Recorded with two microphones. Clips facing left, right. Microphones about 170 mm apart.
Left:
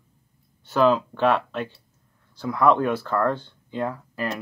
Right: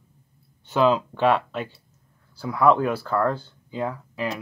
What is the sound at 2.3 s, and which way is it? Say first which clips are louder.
Speech: right 1 dB; 5° right (ahead or behind).